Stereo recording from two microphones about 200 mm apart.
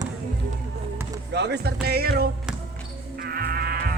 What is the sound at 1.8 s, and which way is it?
Music, 50° right (ahead or behind).